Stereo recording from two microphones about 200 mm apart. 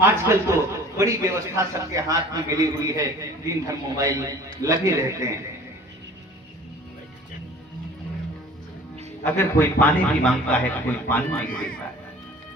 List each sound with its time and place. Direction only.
0.0 s a man's voice: 15° right (ahead or behind)
9.2 s a man's voice: 10° left (ahead or behind)
11.4 s speech: 45° left (ahead or behind)